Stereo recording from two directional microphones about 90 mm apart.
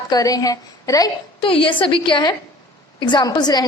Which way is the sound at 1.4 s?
80° left.